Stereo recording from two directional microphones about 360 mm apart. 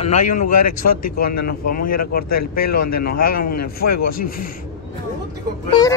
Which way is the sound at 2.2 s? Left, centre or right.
Left.